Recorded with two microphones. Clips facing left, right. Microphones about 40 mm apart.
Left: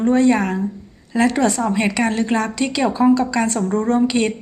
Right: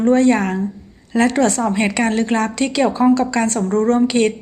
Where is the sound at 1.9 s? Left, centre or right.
Right.